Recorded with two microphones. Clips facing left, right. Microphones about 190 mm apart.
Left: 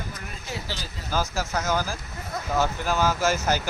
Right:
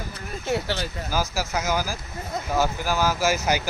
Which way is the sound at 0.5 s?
65° right (ahead or behind).